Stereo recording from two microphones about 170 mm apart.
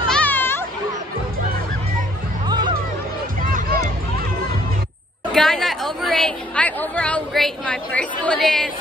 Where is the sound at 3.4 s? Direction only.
55° right (ahead or behind).